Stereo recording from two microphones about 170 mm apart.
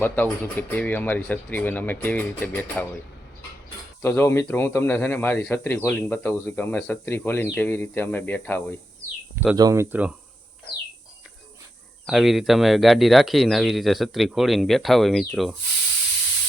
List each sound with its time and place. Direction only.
0.0 s a man's voice: 10° left (ahead or behind)
4.0 s a man's voice: 10° left (ahead or behind)
9.3 s speech: 10° right (ahead or behind)
9.6 s speech: 20° right (ahead or behind)
9.9 s speech: 10° right (ahead or behind)
12.0 s speech: centre (ahead or behind)